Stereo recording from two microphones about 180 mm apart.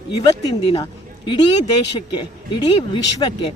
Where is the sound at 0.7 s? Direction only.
25° left (ahead or behind).